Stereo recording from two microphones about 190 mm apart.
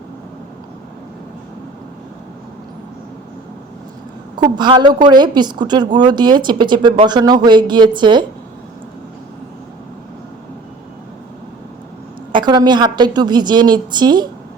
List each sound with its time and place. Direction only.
4.4 s speech: 25° right (ahead or behind)
12.3 s speech: 25° right (ahead or behind)